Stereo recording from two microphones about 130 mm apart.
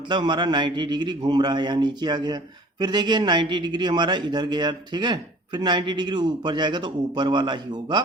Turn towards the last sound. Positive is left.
turn(degrees=-35)  # may be behind; listen again after turning